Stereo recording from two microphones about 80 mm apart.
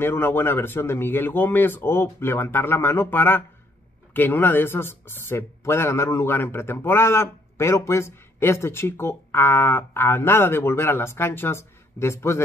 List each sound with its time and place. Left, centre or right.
0.0 s speech: left